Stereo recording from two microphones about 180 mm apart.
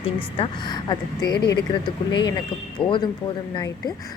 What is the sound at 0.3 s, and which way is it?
Speech, 30° left (ahead or behind).